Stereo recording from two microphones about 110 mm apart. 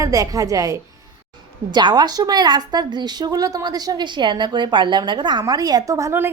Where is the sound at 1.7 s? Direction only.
40° right (ahead or behind).